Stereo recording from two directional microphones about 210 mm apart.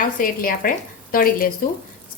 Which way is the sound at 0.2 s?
40° left (ahead or behind).